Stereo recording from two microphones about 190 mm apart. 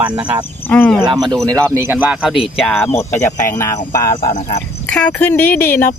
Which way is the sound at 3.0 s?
15° left (ahead or behind).